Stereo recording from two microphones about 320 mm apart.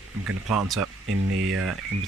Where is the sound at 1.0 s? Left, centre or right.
Right.